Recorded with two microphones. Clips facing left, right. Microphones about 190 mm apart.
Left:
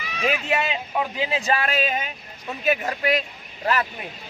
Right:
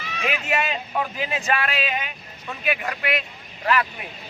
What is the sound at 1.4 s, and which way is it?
Speech, 35° left (ahead or behind).